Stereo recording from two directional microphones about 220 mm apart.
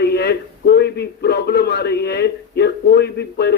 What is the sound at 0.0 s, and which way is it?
A man's voice, 50° left (ahead or behind).